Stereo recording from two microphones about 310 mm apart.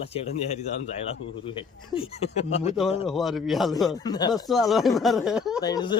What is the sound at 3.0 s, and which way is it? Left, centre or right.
Speech, centre.